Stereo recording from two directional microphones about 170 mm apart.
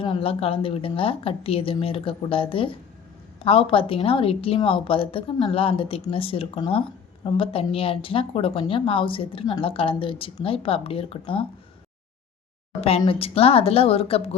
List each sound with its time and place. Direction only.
0.0 s a woman's voice: 30° left (ahead or behind)
13.0 s a woman's voice: 35° left (ahead or behind)